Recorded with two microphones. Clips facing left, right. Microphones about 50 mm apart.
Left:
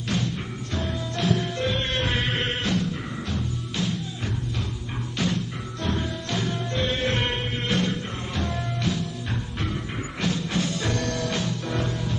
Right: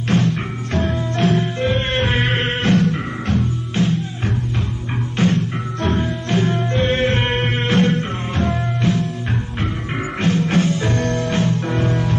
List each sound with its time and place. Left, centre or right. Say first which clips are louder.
0.1 s music: right 11 dB; right
2.7 s music: right 10 dB; right
5.1 s music: right 9 dB; right
7.3 s music: right 8 dB; right
10.2 s music: right 9 dB; right
10.7 s music: right 7 dB; right